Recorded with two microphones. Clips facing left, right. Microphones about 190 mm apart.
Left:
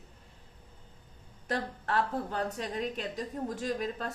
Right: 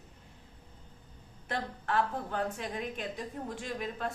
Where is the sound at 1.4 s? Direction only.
40° left (ahead or behind).